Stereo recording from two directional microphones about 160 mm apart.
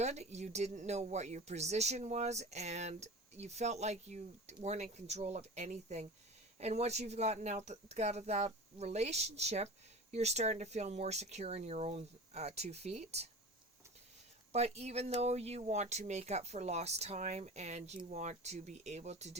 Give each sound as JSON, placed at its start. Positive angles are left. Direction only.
{"t": 0.0, "sound": "speech", "side_deg": -45}
{"t": 14.5, "sound": "speech", "side_deg": -40}